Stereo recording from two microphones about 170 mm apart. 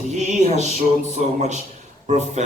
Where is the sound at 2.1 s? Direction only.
40° right (ahead or behind).